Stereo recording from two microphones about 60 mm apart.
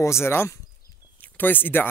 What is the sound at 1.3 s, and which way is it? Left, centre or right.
Speech, left.